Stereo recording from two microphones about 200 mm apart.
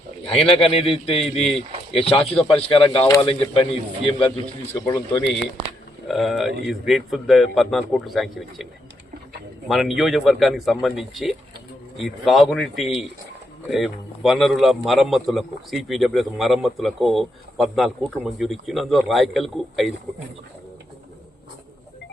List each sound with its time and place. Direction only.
0.7 s speech: 30° left (ahead or behind)
4.7 s speech: 15° left (ahead or behind)
6.1 s a man's voice: centre (ahead or behind)
9.6 s a man's voice: centre (ahead or behind)